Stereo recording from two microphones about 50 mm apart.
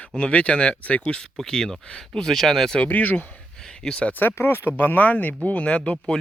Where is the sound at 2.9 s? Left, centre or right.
Left.